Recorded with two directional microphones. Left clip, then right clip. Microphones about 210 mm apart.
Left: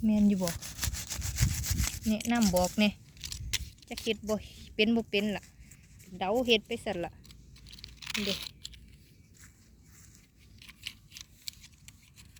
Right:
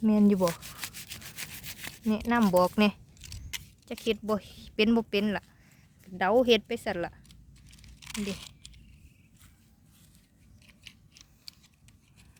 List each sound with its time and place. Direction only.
0.0 s speech: 25° right (ahead or behind)
2.0 s speech: 20° right (ahead or behind)
3.2 s a sound: 30° left (ahead or behind)
4.0 s speech: 25° right (ahead or behind)
6.7 s speech: 15° right (ahead or behind)
8.0 s a sound: 20° left (ahead or behind)
10.6 s scissors: 40° left (ahead or behind)